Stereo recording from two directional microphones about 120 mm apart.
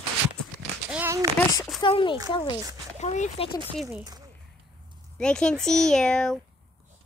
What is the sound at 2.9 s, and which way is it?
Speech, 75° left (ahead or behind).